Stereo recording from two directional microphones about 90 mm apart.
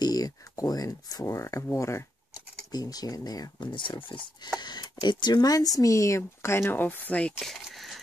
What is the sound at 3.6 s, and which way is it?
Speech, 65° left (ahead or behind).